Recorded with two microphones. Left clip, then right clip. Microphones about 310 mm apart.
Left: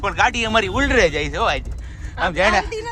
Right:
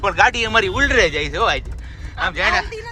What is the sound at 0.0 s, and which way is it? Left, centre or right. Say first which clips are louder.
Speech: right 3 dB; centre.